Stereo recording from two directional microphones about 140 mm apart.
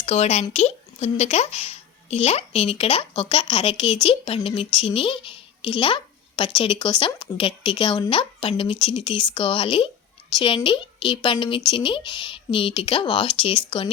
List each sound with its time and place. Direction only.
0.0 s a woman's voice: 50° left (ahead or behind)